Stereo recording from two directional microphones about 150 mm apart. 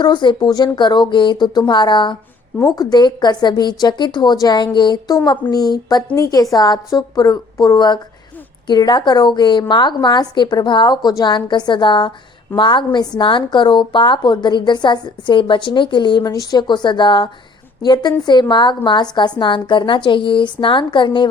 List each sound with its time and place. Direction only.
0.0 s a woman's voice: 30° left (ahead or behind)